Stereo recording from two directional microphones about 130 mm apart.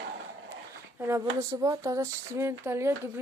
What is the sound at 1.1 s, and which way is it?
Speech, 25° right (ahead or behind).